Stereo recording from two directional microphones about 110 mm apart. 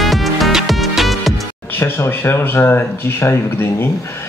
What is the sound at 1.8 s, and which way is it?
Speech, 20° left (ahead or behind).